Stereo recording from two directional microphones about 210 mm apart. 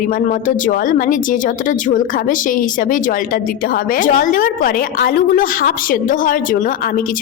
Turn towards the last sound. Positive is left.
turn(degrees=40)  # may be behind; listen again after turning